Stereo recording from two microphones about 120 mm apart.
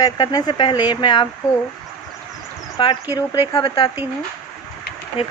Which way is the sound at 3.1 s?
30° left (ahead or behind).